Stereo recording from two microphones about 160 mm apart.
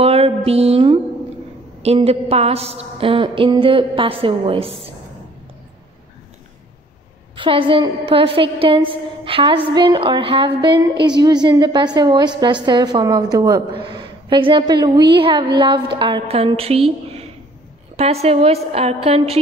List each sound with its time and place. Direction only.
0.0 s music: 40° right (ahead or behind)
1.8 s a woman's voice: 40° right (ahead or behind)
7.3 s a woman's voice: 35° right (ahead or behind)